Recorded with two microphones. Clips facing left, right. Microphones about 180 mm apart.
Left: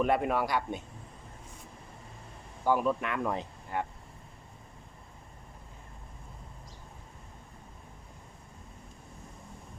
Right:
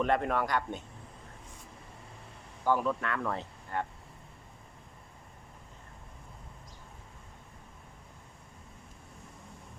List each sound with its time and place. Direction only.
0.0 s speech: 10° left (ahead or behind)
2.6 s speech: 15° left (ahead or behind)